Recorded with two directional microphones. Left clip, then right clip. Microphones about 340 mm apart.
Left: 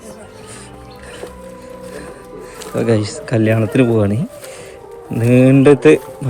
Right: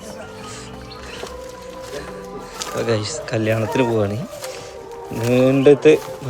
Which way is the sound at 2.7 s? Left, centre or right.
Centre.